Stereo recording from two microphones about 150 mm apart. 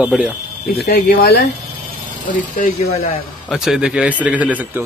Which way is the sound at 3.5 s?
5° right (ahead or behind).